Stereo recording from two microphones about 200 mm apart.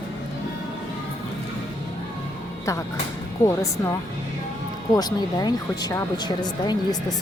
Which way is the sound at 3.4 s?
15° left (ahead or behind).